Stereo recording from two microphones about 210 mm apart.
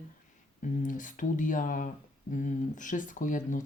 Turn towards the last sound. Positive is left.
turn(degrees=40)  # may be behind; listen again after turning